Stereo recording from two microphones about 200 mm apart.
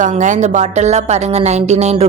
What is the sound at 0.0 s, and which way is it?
A woman's voice, 40° right (ahead or behind).